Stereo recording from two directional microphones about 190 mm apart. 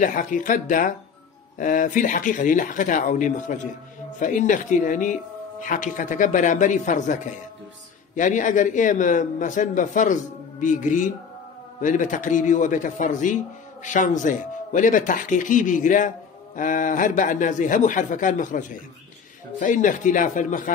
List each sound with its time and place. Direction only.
0.0 s speech: 45° left (ahead or behind)
8.2 s speech: 40° left (ahead or behind)